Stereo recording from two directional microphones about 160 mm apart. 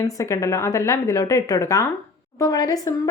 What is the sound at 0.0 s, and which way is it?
A woman's voice, 20° left (ahead or behind).